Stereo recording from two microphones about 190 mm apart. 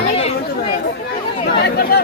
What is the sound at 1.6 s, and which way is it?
Chatter, 55° left (ahead or behind).